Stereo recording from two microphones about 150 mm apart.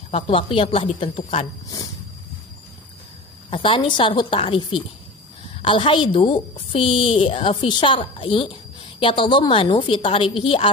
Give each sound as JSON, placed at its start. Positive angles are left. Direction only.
{"t": 0.1, "sound": "a woman's voice", "side_deg": 40}
{"t": 3.4, "sound": "a woman's voice", "side_deg": 35}